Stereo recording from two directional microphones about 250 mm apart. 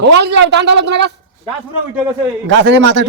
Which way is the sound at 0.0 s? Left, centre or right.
Right.